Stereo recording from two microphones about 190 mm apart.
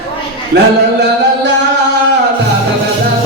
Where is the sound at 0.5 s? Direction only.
60° right (ahead or behind).